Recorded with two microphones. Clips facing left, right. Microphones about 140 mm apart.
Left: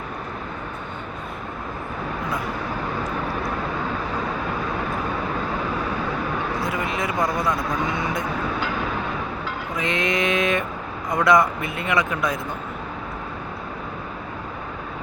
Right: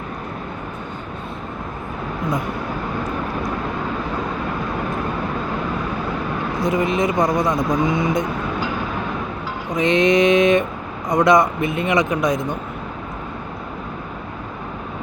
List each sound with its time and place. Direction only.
6.7 s speech: 20° right (ahead or behind)
9.7 s speech: 20° right (ahead or behind)